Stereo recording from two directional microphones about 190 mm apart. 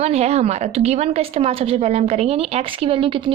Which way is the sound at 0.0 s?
35° right (ahead or behind).